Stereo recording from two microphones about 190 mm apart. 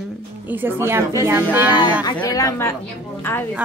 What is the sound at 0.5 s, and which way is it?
Speech, 10° right (ahead or behind).